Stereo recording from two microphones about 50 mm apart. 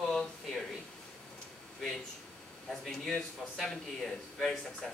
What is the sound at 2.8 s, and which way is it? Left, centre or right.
A man's voice, centre.